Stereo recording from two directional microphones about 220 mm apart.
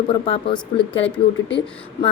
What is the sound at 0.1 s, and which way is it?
Speech, 20° left (ahead or behind).